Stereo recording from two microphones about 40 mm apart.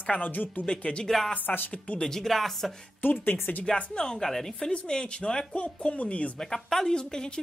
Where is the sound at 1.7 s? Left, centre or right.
Left.